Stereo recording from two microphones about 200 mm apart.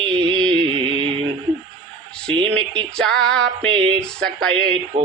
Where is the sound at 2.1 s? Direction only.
5° left (ahead or behind).